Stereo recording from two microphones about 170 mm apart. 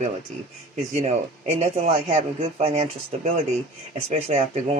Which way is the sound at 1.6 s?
40° right (ahead or behind).